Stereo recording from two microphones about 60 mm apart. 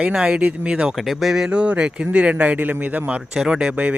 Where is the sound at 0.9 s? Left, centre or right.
Centre; by 3.2 s right.